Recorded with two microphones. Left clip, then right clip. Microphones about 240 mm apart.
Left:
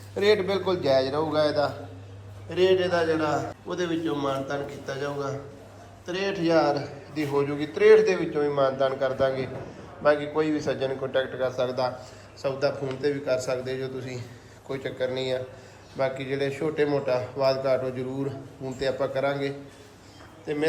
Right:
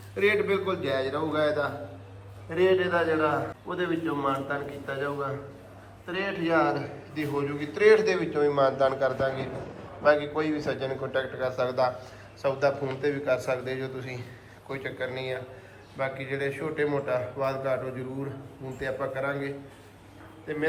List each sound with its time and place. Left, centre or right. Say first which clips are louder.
0.3 s a man's voice: left 2 dB; centre